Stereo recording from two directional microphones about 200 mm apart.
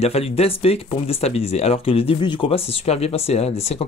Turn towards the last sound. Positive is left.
turn(degrees=30)  # may be behind; listen again after turning